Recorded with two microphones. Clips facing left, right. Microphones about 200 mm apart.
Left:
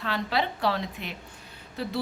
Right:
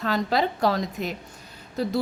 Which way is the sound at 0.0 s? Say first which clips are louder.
Right 5 dB; 40° right (ahead or behind).